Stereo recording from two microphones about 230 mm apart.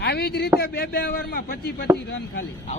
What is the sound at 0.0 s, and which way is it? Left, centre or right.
A man's voice, left.